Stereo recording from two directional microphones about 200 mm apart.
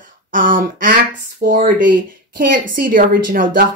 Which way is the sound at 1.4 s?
45° right (ahead or behind).